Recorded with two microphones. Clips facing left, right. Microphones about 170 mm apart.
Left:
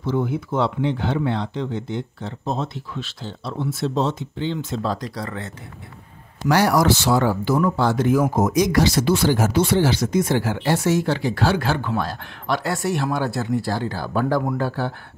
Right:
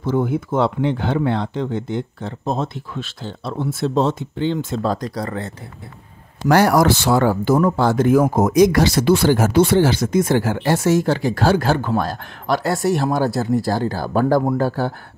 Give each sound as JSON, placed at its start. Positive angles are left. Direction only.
{"t": 0.0, "sound": "speech", "side_deg": -50}
{"t": 6.5, "sound": "speech", "side_deg": -50}